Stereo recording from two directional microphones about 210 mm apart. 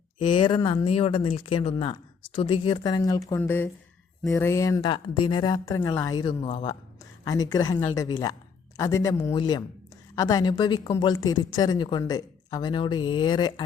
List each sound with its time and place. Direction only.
0.2 s speech: 20° left (ahead or behind)